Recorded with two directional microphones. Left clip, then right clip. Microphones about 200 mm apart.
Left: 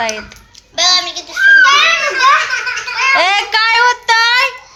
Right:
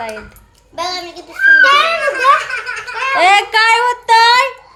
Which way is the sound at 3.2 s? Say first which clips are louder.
Right 2 dB; 10° right (ahead or behind).